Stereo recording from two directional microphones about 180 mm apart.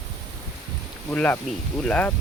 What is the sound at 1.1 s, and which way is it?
Speech, 10° left (ahead or behind).